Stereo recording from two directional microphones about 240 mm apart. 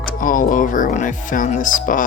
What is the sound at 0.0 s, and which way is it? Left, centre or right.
Speech, left.